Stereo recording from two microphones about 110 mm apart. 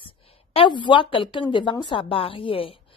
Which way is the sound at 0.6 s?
50° left (ahead or behind).